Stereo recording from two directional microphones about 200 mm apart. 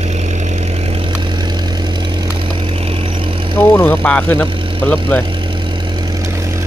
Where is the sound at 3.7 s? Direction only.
10° left (ahead or behind).